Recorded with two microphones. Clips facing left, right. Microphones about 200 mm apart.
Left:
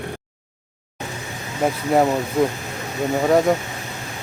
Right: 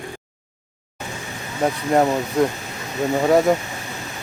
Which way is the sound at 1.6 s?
5° left (ahead or behind).